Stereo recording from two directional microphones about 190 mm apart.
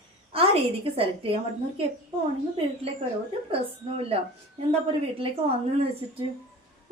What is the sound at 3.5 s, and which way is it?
Speech, 30° right (ahead or behind).